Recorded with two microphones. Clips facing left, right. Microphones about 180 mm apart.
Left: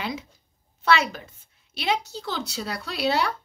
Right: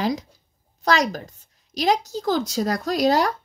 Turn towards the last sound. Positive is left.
turn(degrees=-40)  # may be behind; listen again after turning